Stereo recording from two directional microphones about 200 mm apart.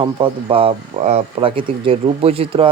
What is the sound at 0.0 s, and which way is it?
Speech, 25° right (ahead or behind).